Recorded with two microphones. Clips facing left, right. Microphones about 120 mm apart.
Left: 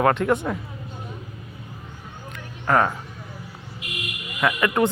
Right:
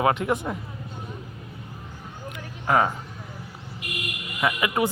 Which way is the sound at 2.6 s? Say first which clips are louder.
Left 1 dB; 15° right (ahead or behind).